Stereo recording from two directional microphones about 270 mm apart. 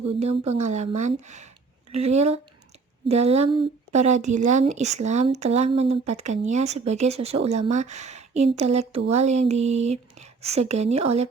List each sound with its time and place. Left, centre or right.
0.2 s speech: right